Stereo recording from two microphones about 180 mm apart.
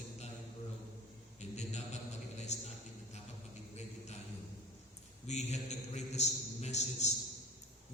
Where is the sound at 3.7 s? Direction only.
35° left (ahead or behind).